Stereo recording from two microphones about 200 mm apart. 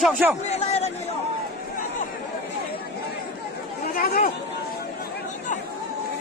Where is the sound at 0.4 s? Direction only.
35° left (ahead or behind).